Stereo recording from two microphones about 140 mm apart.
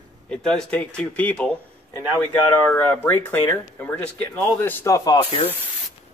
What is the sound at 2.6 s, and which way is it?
Speech, 15° left (ahead or behind).